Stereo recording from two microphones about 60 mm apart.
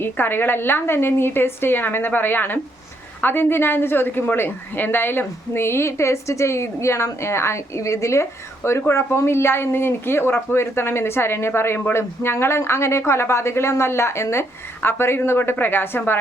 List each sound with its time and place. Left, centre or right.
0.0 s a woman's voice: left